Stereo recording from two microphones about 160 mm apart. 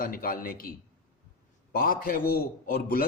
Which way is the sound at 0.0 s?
65° left (ahead or behind).